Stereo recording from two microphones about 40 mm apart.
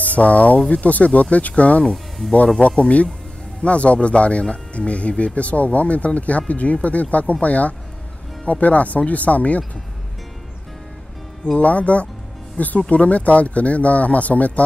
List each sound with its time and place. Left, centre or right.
0.0 s speech: left
11.5 s speech: left